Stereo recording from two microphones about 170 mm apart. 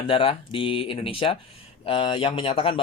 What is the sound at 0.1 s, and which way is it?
Speech, 30° left (ahead or behind).